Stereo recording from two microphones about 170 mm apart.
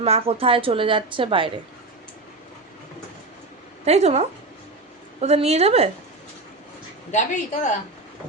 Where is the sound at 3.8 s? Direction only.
40° right (ahead or behind).